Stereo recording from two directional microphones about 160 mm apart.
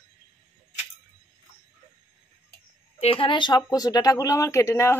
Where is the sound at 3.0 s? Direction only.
35° left (ahead or behind).